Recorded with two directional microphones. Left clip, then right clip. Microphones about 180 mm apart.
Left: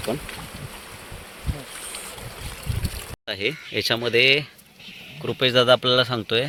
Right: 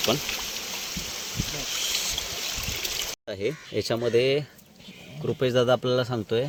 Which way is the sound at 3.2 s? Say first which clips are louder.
Left 4 dB; 5° right (ahead or behind).